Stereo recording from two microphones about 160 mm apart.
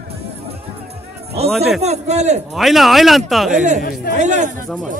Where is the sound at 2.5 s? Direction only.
Centre (ahead or behind).